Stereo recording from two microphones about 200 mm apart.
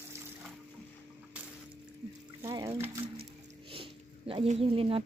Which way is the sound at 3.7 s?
25° right (ahead or behind).